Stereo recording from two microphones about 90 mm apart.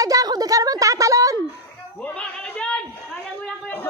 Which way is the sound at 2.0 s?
15° left (ahead or behind).